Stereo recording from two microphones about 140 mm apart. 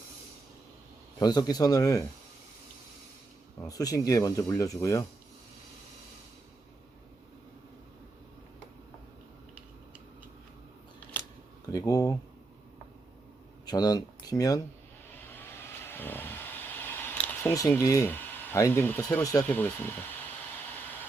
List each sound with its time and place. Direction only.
1.2 s speech: 30° left (ahead or behind)
3.7 s speech: 25° left (ahead or behind)
11.7 s speech: 25° left (ahead or behind)
13.7 s speech: 30° left (ahead or behind)
15.3 s vehicle: 15° left (ahead or behind)
17.7 s speech: 20° left (ahead or behind)
19.5 s a sound: 10° left (ahead or behind)